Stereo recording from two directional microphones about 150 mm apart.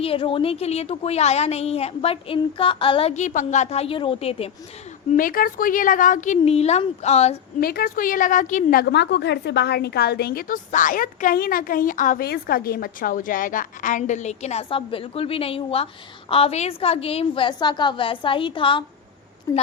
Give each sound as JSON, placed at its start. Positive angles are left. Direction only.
{"t": 0.0, "sound": "a woman's voice", "side_deg": 40}
{"t": 5.1, "sound": "a woman's voice", "side_deg": 70}
{"t": 7.6, "sound": "a woman's voice", "side_deg": 85}
{"t": 9.4, "sound": "a woman's voice", "side_deg": 90}
{"t": 19.5, "sound": "speech", "side_deg": 20}